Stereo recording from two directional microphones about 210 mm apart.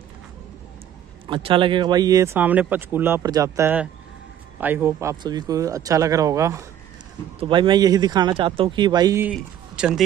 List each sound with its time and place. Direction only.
1.2 s speech: 25° right (ahead or behind)
9.3 s a man's voice: 5° right (ahead or behind)